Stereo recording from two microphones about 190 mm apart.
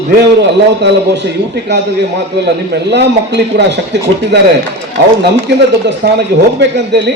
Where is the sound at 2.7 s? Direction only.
65° right (ahead or behind).